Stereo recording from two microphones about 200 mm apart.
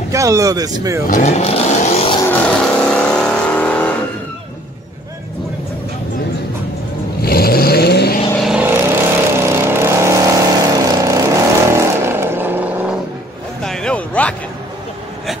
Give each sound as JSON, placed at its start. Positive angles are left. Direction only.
{"t": 0.1, "sound": "speech", "side_deg": -15}
{"t": 1.0, "sound": "speech", "side_deg": 40}
{"t": 2.2, "sound": "vehicle", "side_deg": 10}
{"t": 7.2, "sound": "vehicle", "side_deg": 50}
{"t": 8.4, "sound": "vehicle", "side_deg": -5}
{"t": 13.6, "sound": "a sound", "side_deg": 5}